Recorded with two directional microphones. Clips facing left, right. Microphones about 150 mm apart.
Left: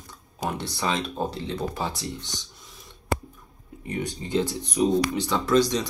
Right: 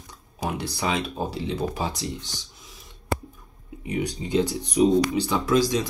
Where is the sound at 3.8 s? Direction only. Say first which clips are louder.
Right 3 dB; 10° right (ahead or behind).